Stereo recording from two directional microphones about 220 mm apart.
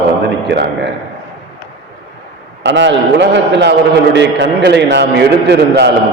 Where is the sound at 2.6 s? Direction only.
55° right (ahead or behind).